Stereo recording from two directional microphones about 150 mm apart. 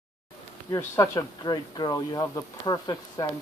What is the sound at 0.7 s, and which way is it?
Speech, 25° left (ahead or behind).